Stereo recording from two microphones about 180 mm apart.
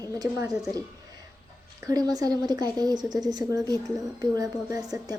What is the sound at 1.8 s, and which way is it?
A woman's voice, 20° right (ahead or behind).